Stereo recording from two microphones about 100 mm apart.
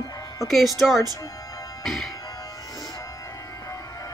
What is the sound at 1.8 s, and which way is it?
Music, centre (ahead or behind).